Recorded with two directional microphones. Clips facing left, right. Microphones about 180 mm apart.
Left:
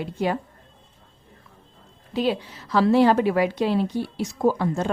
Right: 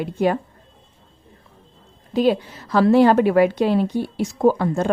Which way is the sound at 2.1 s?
50° right (ahead or behind).